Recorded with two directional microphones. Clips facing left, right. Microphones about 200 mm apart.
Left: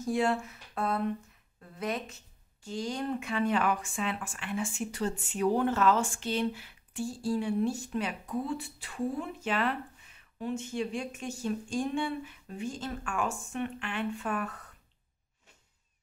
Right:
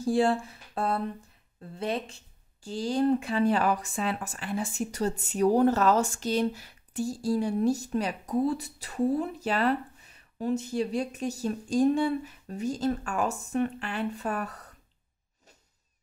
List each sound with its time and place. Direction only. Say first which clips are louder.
0.0 s speech: right 4 dB; 30° right (ahead or behind)